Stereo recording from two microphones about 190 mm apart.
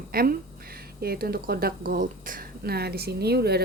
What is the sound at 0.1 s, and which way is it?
A woman's voice, 50° right (ahead or behind).